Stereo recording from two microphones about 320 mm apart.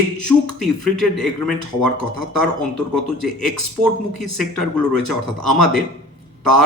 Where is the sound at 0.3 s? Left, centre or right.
Centre.